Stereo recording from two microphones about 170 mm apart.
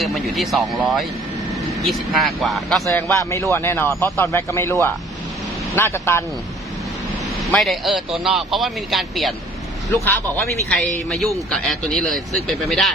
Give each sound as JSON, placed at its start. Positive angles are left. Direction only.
{"t": 0.0, "sound": "speech", "side_deg": 0}
{"t": 2.8, "sound": "speech", "side_deg": 15}
{"t": 7.5, "sound": "speech", "side_deg": 0}
{"t": 10.8, "sound": "speech", "side_deg": 0}